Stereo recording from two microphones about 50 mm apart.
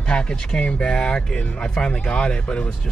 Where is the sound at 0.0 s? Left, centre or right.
Centre.